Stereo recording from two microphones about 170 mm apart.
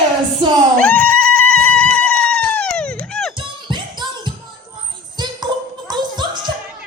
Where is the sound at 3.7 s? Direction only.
25° right (ahead or behind).